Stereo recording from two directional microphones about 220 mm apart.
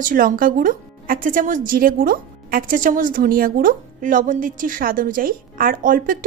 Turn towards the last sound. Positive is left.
turn(degrees=-40)  # may be behind; listen again after turning